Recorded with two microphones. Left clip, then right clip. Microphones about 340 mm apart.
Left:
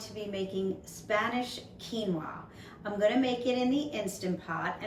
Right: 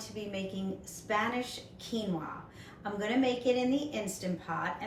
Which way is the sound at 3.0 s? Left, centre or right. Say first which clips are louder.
Left 3 dB; centre.